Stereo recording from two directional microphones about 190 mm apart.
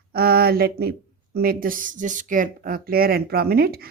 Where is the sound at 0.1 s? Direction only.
55° right (ahead or behind).